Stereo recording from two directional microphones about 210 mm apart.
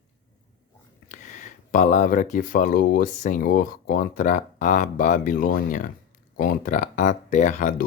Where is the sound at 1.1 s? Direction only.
35° left (ahead or behind).